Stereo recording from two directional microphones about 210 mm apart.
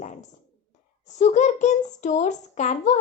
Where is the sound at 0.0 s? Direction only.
35° left (ahead or behind).